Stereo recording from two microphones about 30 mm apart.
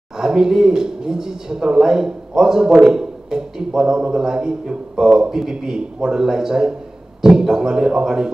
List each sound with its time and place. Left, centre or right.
0.2 s speech: right